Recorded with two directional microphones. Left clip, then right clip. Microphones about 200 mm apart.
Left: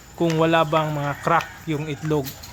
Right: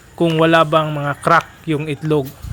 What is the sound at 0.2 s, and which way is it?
A man's voice, 15° right (ahead or behind).